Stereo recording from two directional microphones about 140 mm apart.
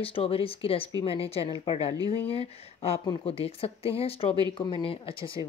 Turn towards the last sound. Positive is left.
turn(degrees=40)  # may be behind; listen again after turning